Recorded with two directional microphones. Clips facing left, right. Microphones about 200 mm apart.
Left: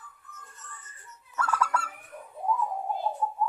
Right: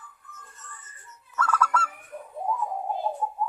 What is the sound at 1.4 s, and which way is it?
Goose, 15° left (ahead or behind).